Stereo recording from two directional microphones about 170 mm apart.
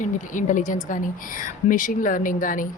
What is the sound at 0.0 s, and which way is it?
Speech, 50° left (ahead or behind).